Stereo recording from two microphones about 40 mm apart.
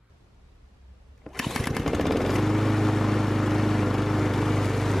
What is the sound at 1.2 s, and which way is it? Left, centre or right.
Lawn mower, centre.